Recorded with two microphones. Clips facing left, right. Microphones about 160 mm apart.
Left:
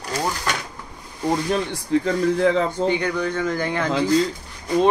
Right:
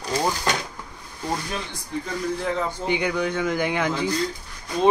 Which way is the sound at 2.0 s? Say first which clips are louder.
Left 6 dB; 90° left.